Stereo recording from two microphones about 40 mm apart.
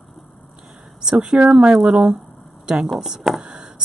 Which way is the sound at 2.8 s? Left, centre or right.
Centre.